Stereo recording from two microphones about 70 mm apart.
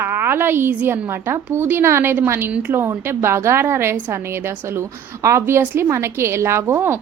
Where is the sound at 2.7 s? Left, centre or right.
Right.